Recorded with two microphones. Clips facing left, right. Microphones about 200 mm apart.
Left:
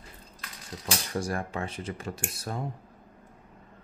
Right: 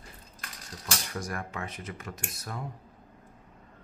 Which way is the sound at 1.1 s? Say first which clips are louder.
Left 7 dB; 30° left (ahead or behind).